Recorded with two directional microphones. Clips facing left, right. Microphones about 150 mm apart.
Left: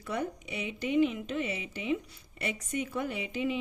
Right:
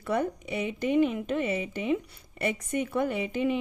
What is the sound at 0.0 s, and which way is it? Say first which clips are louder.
A woman's voice: right 6 dB; 55° right (ahead or behind).